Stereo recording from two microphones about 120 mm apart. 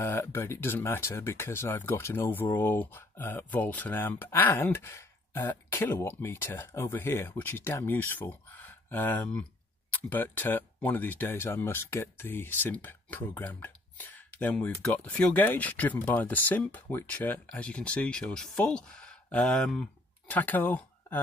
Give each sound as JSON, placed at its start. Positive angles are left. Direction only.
{"t": 0.0, "sound": "speech", "side_deg": 20}